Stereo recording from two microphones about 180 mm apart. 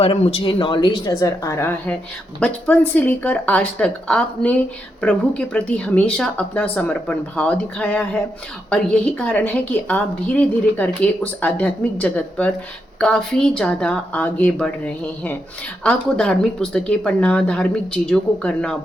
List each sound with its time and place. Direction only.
0.0 s a woman's voice: 35° left (ahead or behind); by 18.8 s 5° left (ahead or behind)